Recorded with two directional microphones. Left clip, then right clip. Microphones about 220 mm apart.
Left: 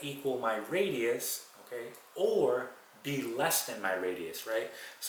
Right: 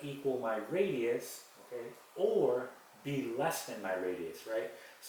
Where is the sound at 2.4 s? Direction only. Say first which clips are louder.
Left 2 dB; 20° right (ahead or behind).